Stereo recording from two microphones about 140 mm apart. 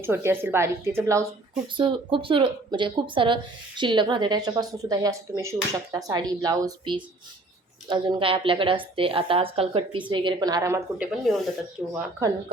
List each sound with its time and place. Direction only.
0.0 s a woman's voice: 15° right (ahead or behind)
1.6 s speech: 35° right (ahead or behind); by 10.8 s 20° right (ahead or behind)
10.9 s speech: 5° right (ahead or behind)
11.8 s a woman's voice: 10° right (ahead or behind)